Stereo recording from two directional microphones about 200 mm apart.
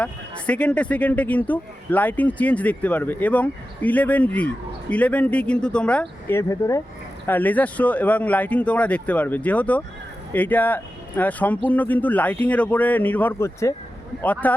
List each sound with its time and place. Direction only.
0.0 s speech: 5° left (ahead or behind)